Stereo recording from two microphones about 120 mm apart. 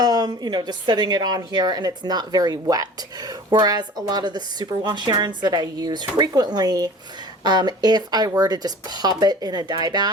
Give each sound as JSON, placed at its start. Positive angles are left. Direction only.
{"t": 0.0, "sound": "a woman's voice", "side_deg": -35}